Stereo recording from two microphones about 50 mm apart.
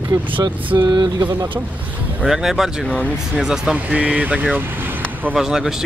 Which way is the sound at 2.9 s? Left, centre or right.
Left.